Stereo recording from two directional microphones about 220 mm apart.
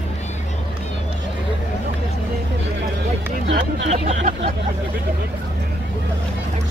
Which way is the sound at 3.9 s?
30° right (ahead or behind).